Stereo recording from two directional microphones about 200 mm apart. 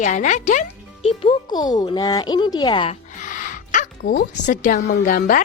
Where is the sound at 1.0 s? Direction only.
25° left (ahead or behind).